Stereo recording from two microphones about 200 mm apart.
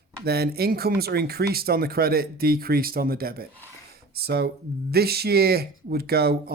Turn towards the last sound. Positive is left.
turn(degrees=-50)  # may be behind; listen again after turning